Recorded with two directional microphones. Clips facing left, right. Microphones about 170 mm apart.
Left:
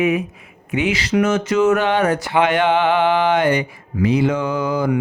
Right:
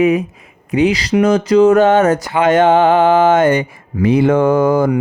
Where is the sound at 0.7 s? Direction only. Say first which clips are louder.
Right 5 dB; 35° right (ahead or behind).